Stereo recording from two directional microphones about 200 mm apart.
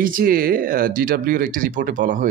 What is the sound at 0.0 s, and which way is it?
Speech, 45° right (ahead or behind).